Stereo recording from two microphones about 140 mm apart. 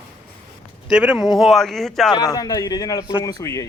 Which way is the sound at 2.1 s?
25° left (ahead or behind).